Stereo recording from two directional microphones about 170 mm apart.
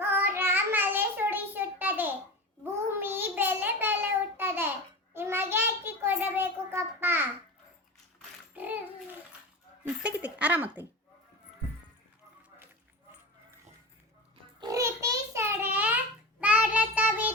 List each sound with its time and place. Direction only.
0.0 s child singing: 10° right (ahead or behind)
8.5 s a sound: 10° right (ahead or behind)
9.8 s a woman's voice: 10° right (ahead or behind)
14.6 s pig: 20° right (ahead or behind)
16.4 s child singing: 10° right (ahead or behind)